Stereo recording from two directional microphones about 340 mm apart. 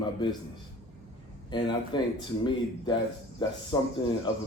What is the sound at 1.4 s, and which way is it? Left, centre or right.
A man's voice, centre.